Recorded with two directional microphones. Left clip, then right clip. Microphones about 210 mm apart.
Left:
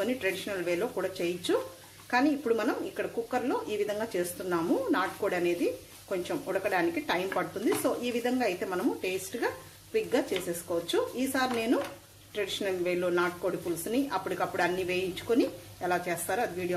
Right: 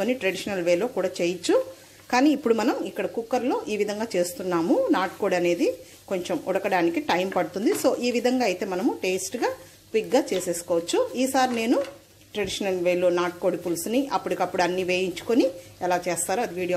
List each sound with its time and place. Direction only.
0.0 s speech: 35° right (ahead or behind)
10.9 s speech: 35° right (ahead or behind)